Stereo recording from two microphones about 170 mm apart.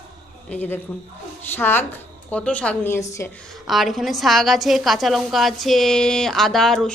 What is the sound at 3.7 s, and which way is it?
A woman's voice, centre (ahead or behind).